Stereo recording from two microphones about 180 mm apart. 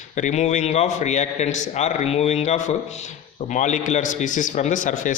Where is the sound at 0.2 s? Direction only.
40° left (ahead or behind).